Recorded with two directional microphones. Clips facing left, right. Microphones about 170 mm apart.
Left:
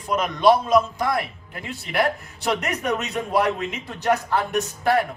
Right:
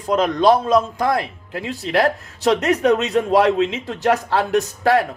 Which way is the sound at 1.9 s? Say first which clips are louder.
Right 4 dB; 90° right.